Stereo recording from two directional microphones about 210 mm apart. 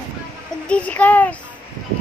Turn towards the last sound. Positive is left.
turn(degrees=5)  # may be behind; listen again after turning